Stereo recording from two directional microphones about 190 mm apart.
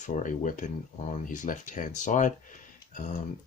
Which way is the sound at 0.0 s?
40° left (ahead or behind).